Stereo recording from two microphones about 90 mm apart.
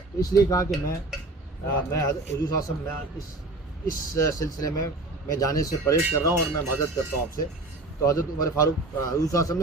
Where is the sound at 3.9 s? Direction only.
35° left (ahead or behind).